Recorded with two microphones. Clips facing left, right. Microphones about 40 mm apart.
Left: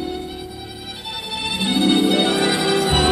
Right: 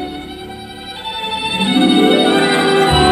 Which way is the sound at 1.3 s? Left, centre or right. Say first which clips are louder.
Right 6 dB; centre.